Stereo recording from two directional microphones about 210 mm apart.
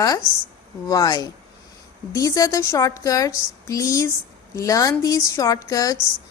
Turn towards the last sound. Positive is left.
turn(degrees=15)  # may be behind; listen again after turning